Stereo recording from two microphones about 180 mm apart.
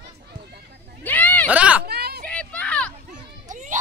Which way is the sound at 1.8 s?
60° right (ahead or behind).